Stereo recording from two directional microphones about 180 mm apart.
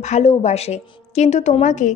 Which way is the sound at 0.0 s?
40° left (ahead or behind).